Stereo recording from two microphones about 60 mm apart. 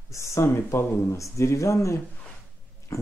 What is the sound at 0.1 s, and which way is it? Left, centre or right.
Speech, left.